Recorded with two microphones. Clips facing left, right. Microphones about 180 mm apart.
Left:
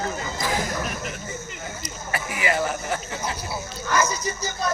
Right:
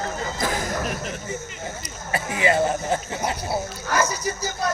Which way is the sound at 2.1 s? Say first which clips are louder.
Right 4 dB; 25° right (ahead or behind).